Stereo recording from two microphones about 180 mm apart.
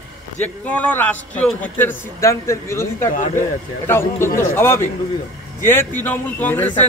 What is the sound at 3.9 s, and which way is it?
A man's voice, 15° left (ahead or behind).